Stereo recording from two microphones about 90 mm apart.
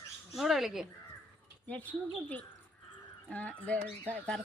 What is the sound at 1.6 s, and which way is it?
Speech, 15° left (ahead or behind).